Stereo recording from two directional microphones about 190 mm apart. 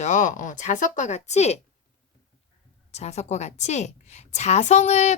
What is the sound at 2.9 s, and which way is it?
Speech, 35° left (ahead or behind).